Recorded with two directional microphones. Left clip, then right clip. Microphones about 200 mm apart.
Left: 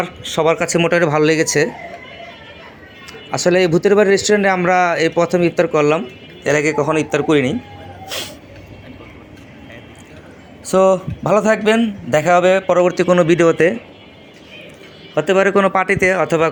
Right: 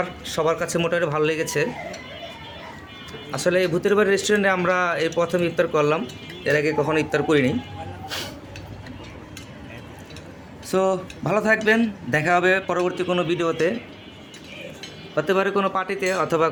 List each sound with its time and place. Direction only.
0.0 s speech: 20° left (ahead or behind)
3.1 s speech: 25° left (ahead or behind)
8.0 s music: 15° left (ahead or behind)
10.7 s speech: 15° left (ahead or behind)
15.1 s speech: 25° left (ahead or behind)